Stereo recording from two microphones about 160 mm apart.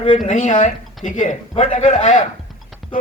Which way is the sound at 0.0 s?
50° left (ahead or behind).